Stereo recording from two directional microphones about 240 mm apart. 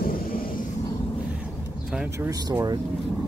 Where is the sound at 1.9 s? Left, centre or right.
Centre.